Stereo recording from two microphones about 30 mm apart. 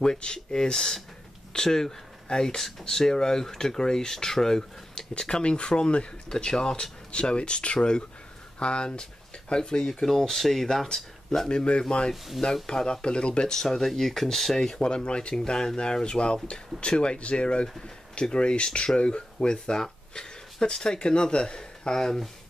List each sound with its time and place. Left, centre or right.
0.0 s speech: left
0.7 s speech: centre
5.1 s speech: left
6.4 s speech: left
7.1 s speech: left
10.0 s speech: centre
11.4 s speech: left
12.6 s speech: left
13.0 s speech: left
13.6 s speech: centre
14.8 s speech: left